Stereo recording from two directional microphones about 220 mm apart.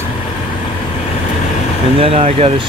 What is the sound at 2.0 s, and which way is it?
Speech, 25° right (ahead or behind).